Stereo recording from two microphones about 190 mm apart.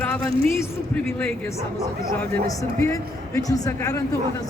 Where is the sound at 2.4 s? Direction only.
15° left (ahead or behind).